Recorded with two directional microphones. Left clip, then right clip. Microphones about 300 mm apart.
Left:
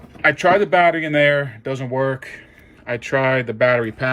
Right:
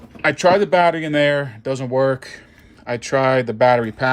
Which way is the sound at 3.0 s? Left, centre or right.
Centre.